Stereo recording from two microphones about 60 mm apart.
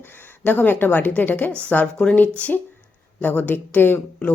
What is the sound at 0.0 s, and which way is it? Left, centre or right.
A woman's voice, left.